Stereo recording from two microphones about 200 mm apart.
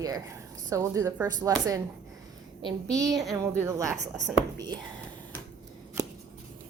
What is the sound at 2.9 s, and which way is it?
Speech, 15° right (ahead or behind).